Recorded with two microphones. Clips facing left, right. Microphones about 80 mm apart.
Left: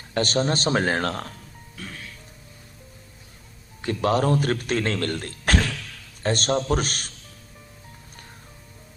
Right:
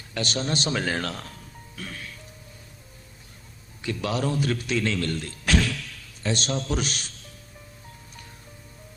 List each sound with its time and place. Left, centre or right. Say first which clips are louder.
0.1 s a man's voice: left 5 dB; left
3.8 s speech: left 6 dB; left